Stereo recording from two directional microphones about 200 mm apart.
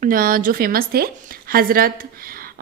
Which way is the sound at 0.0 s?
45° right (ahead or behind).